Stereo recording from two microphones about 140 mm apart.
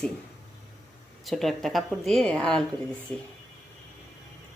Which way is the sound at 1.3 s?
Centre (ahead or behind).